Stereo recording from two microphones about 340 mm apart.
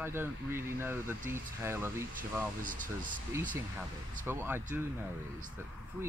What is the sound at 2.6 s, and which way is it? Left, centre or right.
Speech, right.